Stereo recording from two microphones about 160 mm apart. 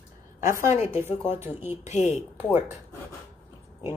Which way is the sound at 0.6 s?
15° right (ahead or behind).